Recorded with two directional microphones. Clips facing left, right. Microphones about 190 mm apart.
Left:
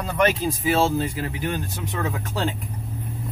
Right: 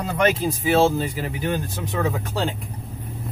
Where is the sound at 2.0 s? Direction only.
15° right (ahead or behind).